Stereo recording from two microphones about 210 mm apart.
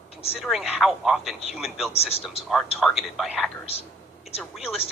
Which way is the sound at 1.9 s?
30° left (ahead or behind).